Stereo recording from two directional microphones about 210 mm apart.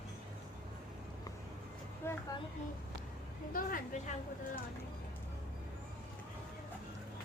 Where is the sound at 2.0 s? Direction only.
10° left (ahead or behind).